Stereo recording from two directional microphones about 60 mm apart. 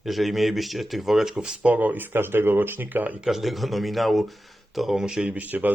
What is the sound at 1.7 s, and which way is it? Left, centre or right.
Speech, right.